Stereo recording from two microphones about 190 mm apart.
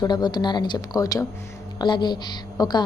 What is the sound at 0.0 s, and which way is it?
A woman's voice, 20° left (ahead or behind).